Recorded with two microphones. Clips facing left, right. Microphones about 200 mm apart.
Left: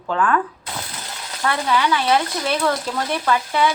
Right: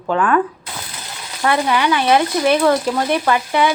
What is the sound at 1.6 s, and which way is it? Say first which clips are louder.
A woman's voice: left 1 dB; 15° right (ahead or behind).